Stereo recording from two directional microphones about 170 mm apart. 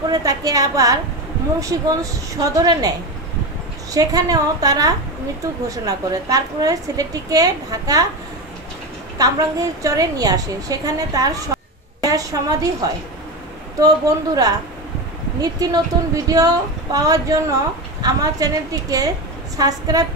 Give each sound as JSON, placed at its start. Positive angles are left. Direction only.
{"t": 0.1, "sound": "a woman's voice", "side_deg": -20}
{"t": 3.9, "sound": "a woman's voice", "side_deg": -20}
{"t": 9.2, "sound": "a woman's voice", "side_deg": -20}